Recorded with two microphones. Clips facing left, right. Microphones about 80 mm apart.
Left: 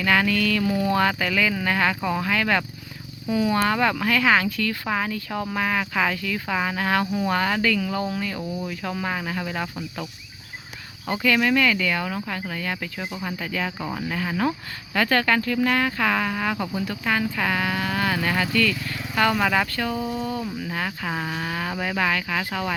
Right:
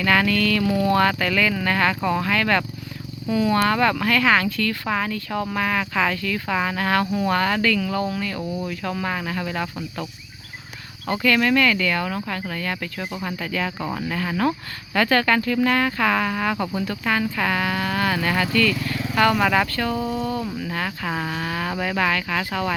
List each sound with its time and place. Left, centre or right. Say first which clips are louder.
0.0 s speech: right 1 dB; centre
11.1 s speech: right 2 dB; centre